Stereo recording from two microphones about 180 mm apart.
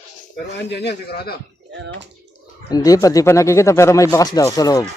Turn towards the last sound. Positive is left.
turn(degrees=20)  # may be behind; listen again after turning